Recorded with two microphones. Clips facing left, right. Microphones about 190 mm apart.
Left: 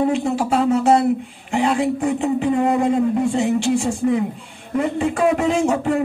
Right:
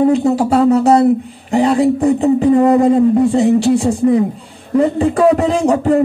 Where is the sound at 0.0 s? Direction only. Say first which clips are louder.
Right 7 dB; 40° right (ahead or behind).